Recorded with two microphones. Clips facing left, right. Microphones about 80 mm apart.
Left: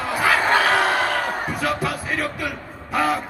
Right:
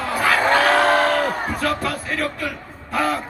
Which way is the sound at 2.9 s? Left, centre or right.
Centre.